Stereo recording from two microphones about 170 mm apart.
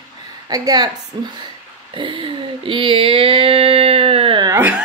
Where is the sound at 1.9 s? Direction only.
30° right (ahead or behind).